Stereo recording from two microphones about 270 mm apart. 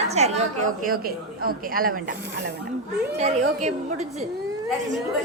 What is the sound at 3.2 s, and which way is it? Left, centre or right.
Speech, right.